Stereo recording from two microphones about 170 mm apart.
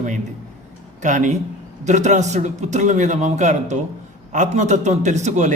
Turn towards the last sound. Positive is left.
turn(degrees=-45)  # may be behind; listen again after turning